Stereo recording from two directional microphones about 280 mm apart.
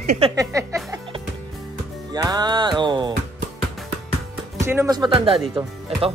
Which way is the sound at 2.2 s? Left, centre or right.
Centre.